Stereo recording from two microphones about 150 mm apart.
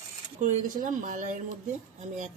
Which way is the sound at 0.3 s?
60° right (ahead or behind).